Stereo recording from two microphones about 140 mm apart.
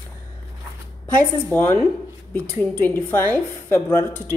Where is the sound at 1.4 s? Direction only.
15° left (ahead or behind).